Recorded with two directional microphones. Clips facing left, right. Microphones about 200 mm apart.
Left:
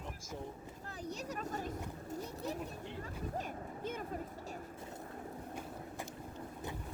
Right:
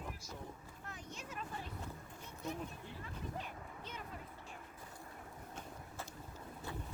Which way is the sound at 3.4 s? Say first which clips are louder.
Left 7 dB; 45° left (ahead or behind).